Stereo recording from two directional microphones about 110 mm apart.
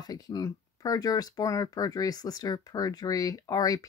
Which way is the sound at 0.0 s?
35° left (ahead or behind).